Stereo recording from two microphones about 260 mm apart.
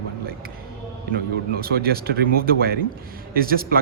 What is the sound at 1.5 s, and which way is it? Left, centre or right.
Speech, right.